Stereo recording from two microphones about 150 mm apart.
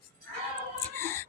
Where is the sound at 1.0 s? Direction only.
15° left (ahead or behind).